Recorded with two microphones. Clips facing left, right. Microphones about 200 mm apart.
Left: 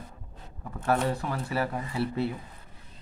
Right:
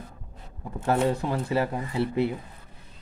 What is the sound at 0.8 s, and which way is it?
Speech, 25° right (ahead or behind).